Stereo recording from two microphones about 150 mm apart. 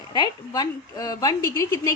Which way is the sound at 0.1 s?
30° left (ahead or behind).